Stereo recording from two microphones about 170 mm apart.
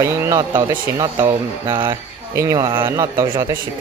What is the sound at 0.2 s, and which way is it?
Speech, 20° right (ahead or behind).